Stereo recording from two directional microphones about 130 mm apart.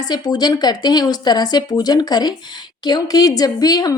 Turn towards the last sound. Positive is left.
turn(degrees=30)  # may be behind; listen again after turning